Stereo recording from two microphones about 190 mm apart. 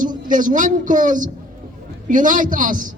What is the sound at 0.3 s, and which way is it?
A man's voice, 45° right (ahead or behind).